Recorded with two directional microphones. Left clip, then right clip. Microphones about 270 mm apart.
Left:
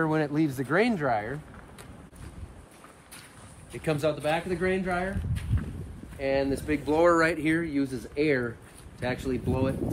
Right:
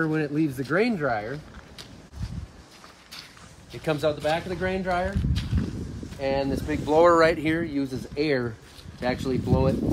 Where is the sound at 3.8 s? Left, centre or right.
Centre.